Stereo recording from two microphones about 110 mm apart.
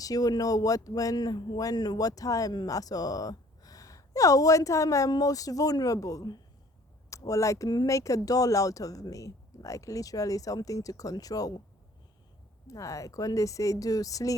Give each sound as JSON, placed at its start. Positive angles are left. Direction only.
{"t": 0.0, "sound": "speech", "side_deg": 35}
{"t": 12.6, "sound": "speech", "side_deg": 30}